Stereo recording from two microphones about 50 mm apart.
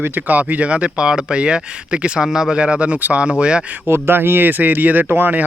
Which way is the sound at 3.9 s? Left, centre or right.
Right.